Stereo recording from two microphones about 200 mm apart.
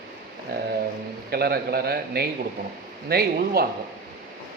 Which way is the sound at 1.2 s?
50° right (ahead or behind).